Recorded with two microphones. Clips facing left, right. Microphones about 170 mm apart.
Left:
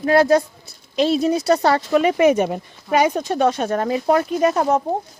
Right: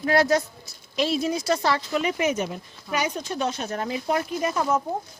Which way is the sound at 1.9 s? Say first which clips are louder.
Left 9 dB; 55° left (ahead or behind).